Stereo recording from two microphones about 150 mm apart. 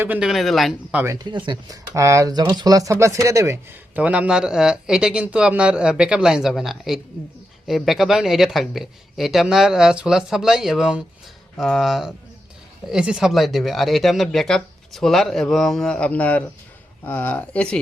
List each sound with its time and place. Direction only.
0.0 s speech: 10° right (ahead or behind)
1.0 s speech: 20° right (ahead or behind); by 17.7 s 10° left (ahead or behind)